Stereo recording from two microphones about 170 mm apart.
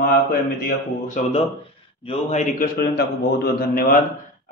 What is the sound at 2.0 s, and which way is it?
A man's voice, 45° left (ahead or behind).